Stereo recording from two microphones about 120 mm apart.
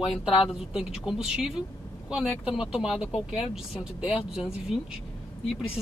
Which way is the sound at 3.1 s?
50° left (ahead or behind).